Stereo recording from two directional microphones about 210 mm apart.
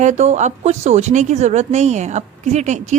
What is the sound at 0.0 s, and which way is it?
A woman's voice, 35° right (ahead or behind).